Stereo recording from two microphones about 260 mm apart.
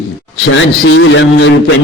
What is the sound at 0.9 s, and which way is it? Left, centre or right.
Speech, left.